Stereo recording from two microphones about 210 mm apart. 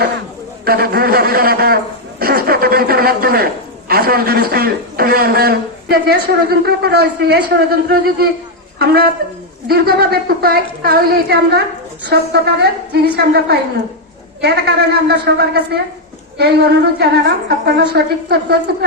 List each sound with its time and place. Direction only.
0.6 s a man's voice: 45° right (ahead or behind)